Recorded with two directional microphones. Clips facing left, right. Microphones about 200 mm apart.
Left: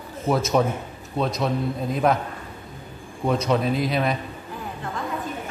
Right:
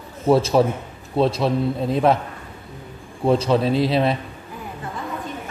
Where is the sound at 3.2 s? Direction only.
30° right (ahead or behind).